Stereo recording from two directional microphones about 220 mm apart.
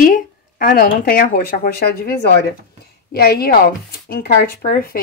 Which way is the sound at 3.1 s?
45° left (ahead or behind).